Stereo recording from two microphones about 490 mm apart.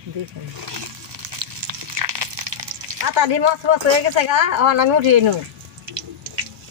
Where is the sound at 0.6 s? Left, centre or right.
Right.